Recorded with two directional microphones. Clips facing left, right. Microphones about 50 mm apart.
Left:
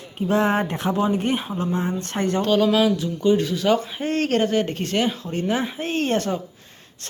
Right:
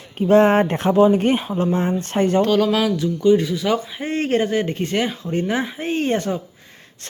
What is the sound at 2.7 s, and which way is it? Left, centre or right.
Speech, right.